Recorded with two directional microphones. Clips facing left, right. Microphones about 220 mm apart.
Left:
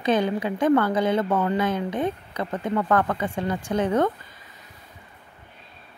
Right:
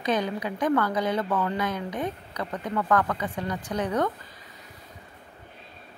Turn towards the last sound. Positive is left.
turn(degrees=25)  # may be behind; listen again after turning